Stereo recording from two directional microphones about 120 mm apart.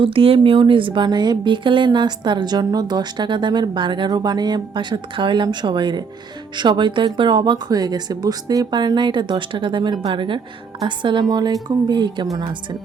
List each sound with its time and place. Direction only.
0.0 s speech: 50° right (ahead or behind)